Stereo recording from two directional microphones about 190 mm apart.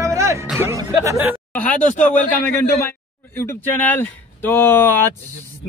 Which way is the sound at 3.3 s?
10° left (ahead or behind).